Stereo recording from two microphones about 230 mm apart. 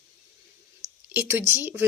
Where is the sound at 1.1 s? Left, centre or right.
Centre.